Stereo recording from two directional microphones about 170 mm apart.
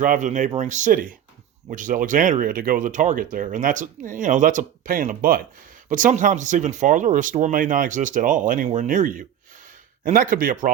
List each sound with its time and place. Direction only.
0.0 s speech: 50° right (ahead or behind)
5.9 s speech: 50° right (ahead or behind)